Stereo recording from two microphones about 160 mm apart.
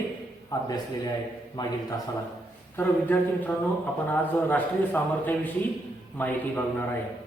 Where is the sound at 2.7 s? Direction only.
10° left (ahead or behind).